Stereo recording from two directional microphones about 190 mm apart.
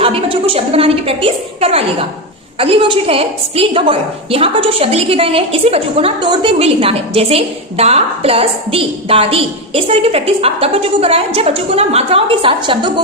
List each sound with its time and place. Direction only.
0.0 s a woman's voice: 30° right (ahead or behind)